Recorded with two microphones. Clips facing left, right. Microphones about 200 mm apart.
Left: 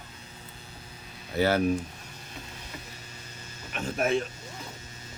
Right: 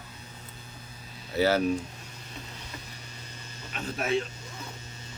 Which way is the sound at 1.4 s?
55° left (ahead or behind).